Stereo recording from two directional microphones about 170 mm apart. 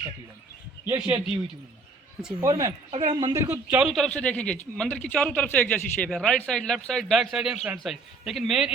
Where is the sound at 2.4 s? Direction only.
20° right (ahead or behind).